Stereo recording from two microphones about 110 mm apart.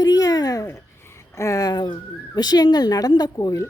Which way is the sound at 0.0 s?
35° left (ahead or behind).